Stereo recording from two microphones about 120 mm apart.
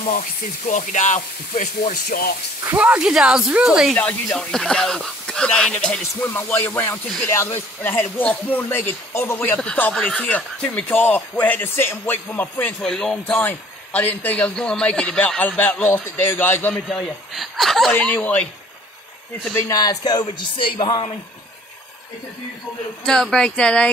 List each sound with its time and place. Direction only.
0.7 s speech: 90° left
2.8 s speech: 5° right (ahead or behind)
3.9 s speech: 10° left (ahead or behind)
6.7 s speech: 25° left (ahead or behind)
7.9 s a man's voice: 10° left (ahead or behind)
12.8 s speech: 5° left (ahead or behind)
13.3 s a man's voice: 15° left (ahead or behind)
16.7 s speech: centre (ahead or behind)
17.9 s a man's voice: 15° left (ahead or behind)
19.7 s speech: 30° left (ahead or behind)
23.0 s a man's voice: 5° left (ahead or behind)